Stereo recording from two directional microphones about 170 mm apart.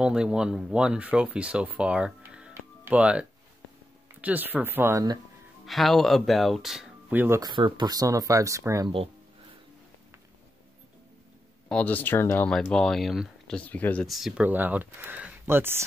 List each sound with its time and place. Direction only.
0.0 s speech: 5° right (ahead or behind); by 5.2 s 20° right (ahead or behind)
5.7 s speech: centre (ahead or behind); by 8.9 s 20° right (ahead or behind)
11.7 s speech: 10° left (ahead or behind)
13.6 s speech: 10° left (ahead or behind); by 15.8 s 15° right (ahead or behind)